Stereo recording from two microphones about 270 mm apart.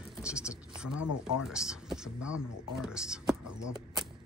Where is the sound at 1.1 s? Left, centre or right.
Left.